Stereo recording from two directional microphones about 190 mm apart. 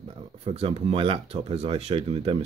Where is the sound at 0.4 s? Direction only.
30° right (ahead or behind).